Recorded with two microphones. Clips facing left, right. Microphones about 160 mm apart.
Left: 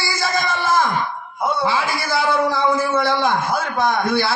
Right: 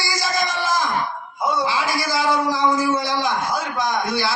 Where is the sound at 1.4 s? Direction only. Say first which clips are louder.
Left 1 dB; 55° left (ahead or behind).